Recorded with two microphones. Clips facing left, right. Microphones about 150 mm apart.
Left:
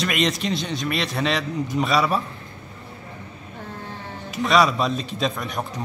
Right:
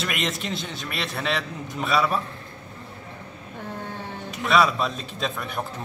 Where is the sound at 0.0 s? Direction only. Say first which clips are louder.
Left 5 dB; centre (ahead or behind).